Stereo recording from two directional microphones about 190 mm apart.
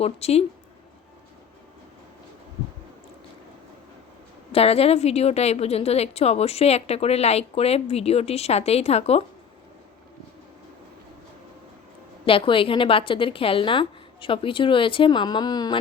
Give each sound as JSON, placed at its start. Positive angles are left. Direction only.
{"t": 0.0, "sound": "a woman's voice", "side_deg": 35}
{"t": 4.5, "sound": "a woman's voice", "side_deg": 30}
{"t": 12.2, "sound": "a woman's voice", "side_deg": 30}